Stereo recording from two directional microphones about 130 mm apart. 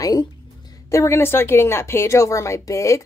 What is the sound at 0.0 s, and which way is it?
Speech, 30° left (ahead or behind).